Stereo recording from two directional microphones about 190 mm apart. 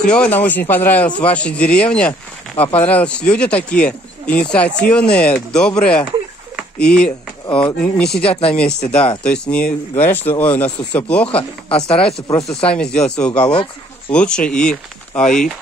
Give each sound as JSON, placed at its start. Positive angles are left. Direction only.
{"t": 0.0, "sound": "a man's voice", "side_deg": 5}
{"t": 2.5, "sound": "speech", "side_deg": 30}
{"t": 2.8, "sound": "speech", "side_deg": 5}
{"t": 6.5, "sound": "a sound", "side_deg": 5}
{"t": 7.5, "sound": "speech", "side_deg": 5}
{"t": 8.3, "sound": "speech", "side_deg": 30}
{"t": 9.2, "sound": "a man's voice", "side_deg": 5}
{"t": 11.9, "sound": "speech", "side_deg": 30}
{"t": 12.6, "sound": "speech", "side_deg": 5}
{"t": 13.5, "sound": "speech", "side_deg": 25}
{"t": 14.1, "sound": "speech", "side_deg": 5}